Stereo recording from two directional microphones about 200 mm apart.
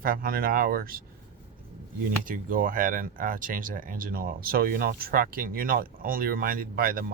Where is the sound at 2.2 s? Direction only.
45° right (ahead or behind).